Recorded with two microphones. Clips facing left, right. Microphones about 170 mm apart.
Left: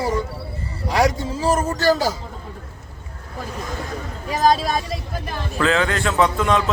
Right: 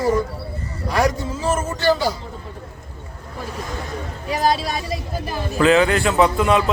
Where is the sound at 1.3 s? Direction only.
35° left (ahead or behind).